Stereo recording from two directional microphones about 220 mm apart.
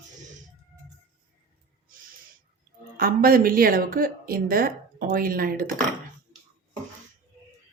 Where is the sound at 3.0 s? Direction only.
40° right (ahead or behind).